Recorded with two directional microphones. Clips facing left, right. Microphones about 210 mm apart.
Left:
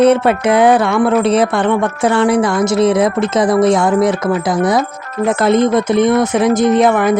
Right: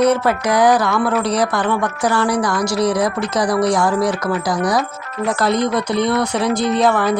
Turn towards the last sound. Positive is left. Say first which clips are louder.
# left 4 dB
turn(degrees=20)  # may be behind; listen again after turning